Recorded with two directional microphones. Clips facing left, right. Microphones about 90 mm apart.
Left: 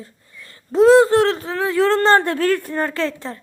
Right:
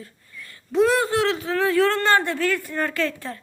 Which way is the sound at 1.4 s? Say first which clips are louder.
Left 1 dB; 20° left (ahead or behind).